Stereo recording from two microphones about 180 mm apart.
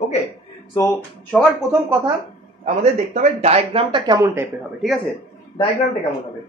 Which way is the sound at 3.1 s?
35° right (ahead or behind).